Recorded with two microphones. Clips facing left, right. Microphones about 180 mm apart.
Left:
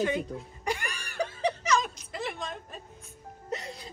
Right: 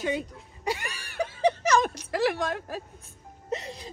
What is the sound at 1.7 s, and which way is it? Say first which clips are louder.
Whimper: right 4 dB; 65° right (ahead or behind).